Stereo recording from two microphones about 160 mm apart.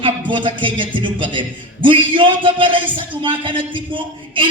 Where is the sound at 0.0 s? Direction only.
30° right (ahead or behind).